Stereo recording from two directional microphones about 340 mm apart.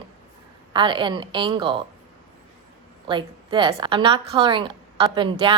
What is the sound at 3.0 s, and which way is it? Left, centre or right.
A woman's voice, centre.